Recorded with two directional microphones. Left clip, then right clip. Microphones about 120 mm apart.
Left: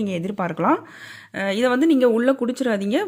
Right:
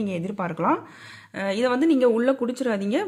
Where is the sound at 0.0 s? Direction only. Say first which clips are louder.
Left 3 dB; 20° left (ahead or behind).